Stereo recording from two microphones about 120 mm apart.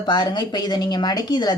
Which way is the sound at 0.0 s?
40° left (ahead or behind).